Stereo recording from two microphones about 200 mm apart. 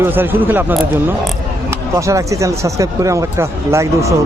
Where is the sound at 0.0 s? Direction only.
10° right (ahead or behind).